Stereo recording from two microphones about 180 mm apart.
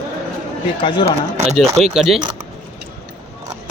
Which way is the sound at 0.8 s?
25° left (ahead or behind).